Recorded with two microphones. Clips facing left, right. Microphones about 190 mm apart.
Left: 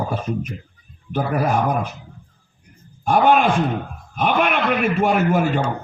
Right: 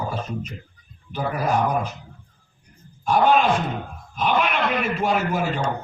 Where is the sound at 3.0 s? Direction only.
55° left (ahead or behind).